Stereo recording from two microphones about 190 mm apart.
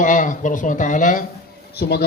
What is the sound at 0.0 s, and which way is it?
Speech, 45° left (ahead or behind).